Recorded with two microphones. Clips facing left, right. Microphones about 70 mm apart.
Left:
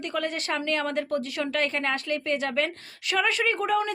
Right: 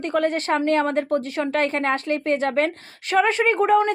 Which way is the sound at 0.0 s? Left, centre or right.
Right.